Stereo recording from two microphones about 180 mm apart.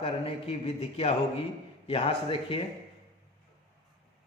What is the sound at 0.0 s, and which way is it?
A man's voice, 35° left (ahead or behind).